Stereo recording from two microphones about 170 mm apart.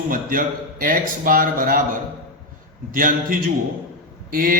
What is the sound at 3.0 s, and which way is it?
A man's voice, 55° right (ahead or behind).